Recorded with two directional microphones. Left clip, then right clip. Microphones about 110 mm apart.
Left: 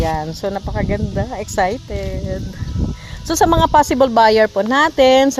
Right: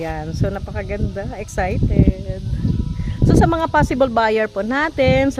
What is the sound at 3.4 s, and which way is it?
Speech, 30° left (ahead or behind).